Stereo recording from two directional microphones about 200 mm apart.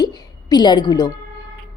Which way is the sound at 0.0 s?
20° left (ahead or behind).